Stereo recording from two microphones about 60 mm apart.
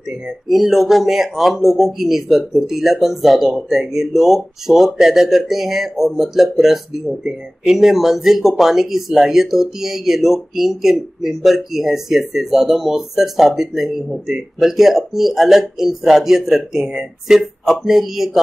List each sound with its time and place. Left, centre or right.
0.5 s speech: centre